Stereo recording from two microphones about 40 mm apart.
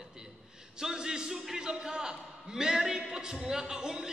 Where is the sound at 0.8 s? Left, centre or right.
Centre.